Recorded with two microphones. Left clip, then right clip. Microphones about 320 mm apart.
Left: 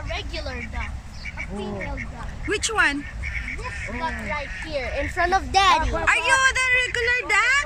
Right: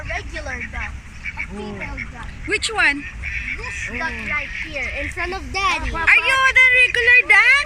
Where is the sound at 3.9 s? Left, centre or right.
Left.